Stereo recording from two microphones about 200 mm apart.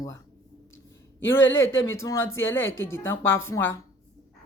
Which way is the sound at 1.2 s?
75° left (ahead or behind).